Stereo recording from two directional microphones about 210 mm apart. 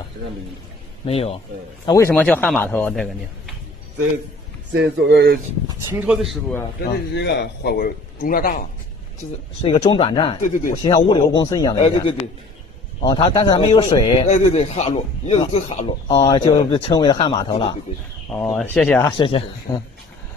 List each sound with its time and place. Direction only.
1.0 s a man's voice: 30° left (ahead or behind)
1.9 s a man's voice: 10° left (ahead or behind)
4.7 s speech: 55° right (ahead or behind)
5.9 s speech: 5° right (ahead or behind)
7.2 s a man's voice: 55° left (ahead or behind)
9.6 s a man's voice: 25° left (ahead or behind)
10.4 s speech: 40° left (ahead or behind)
10.8 s a man's voice: 20° left (ahead or behind)
18.3 s speech: 5° left (ahead or behind)